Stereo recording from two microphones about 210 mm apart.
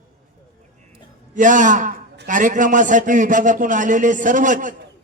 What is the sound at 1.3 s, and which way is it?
A man's voice, 35° right (ahead or behind).